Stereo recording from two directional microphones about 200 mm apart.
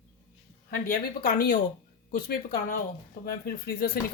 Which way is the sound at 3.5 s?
50° left (ahead or behind).